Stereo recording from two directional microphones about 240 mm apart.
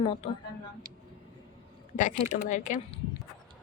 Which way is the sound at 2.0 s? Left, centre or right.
Left.